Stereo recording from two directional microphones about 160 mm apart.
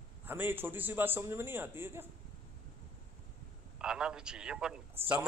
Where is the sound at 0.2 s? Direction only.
10° right (ahead or behind).